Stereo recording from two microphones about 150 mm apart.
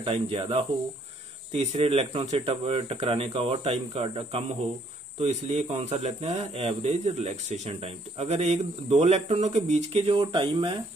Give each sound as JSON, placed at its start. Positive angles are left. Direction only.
{"t": 0.0, "sound": "a man's voice", "side_deg": -40}